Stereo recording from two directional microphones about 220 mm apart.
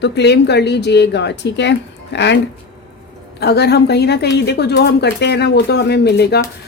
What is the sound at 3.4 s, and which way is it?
A woman's voice, 50° left (ahead or behind).